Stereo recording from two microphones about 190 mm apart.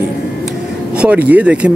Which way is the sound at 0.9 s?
5° right (ahead or behind).